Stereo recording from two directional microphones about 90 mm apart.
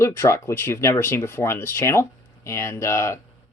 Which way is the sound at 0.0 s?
30° left (ahead or behind).